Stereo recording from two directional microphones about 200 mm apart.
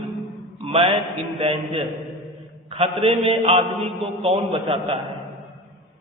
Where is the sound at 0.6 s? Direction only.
30° right (ahead or behind).